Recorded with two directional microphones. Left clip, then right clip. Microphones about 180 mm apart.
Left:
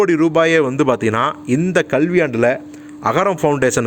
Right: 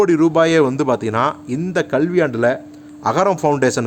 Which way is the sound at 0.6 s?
15° left (ahead or behind).